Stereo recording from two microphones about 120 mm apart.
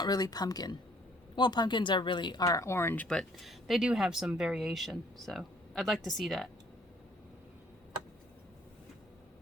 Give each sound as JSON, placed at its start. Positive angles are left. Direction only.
{"t": 0.0, "sound": "speech", "side_deg": 35}